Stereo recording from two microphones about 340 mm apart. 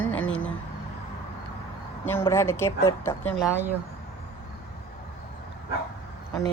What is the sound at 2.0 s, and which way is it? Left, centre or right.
A woman's voice, centre.